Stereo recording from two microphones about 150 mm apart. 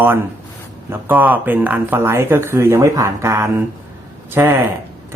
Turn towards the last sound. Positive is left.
turn(degrees=-15)  # may be behind; listen again after turning